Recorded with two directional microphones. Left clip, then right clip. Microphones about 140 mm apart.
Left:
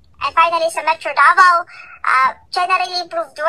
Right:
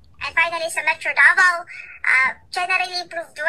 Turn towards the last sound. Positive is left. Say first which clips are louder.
# left 6 dB
turn(degrees=-25)  # may be behind; listen again after turning